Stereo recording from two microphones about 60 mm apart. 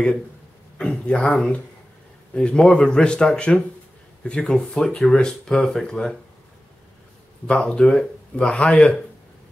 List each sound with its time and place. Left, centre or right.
0.7 s speech: centre
7.4 s a man's voice: centre